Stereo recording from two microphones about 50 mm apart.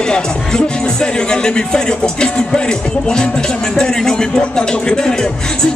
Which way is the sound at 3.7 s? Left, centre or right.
Centre.